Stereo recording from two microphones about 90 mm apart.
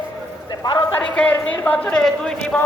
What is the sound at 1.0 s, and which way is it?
A man's voice, 15° left (ahead or behind).